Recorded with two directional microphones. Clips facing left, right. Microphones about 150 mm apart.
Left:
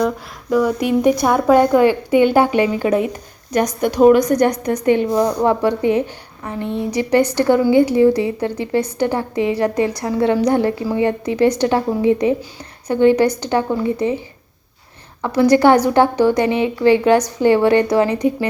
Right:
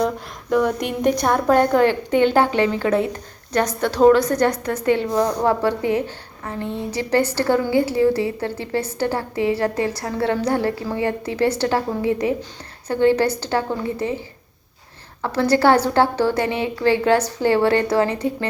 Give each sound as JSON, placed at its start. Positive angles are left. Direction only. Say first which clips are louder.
{"t": 0.5, "sound": "a woman's voice", "louder": "left 4 dB", "side_deg": 5}
{"t": 15.2, "sound": "a woman's voice", "louder": "left 5 dB", "side_deg": 15}